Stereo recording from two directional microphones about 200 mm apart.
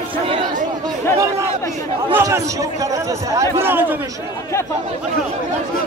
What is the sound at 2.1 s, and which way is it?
A man's voice, 15° right (ahead or behind).